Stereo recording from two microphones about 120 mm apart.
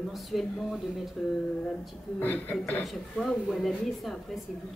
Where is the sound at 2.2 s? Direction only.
15° left (ahead or behind).